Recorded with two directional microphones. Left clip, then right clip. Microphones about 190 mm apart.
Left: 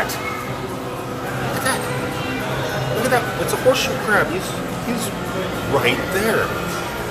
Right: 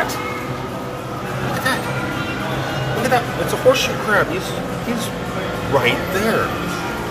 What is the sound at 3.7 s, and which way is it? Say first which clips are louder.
Speech: right 2 dB; 10° right (ahead or behind).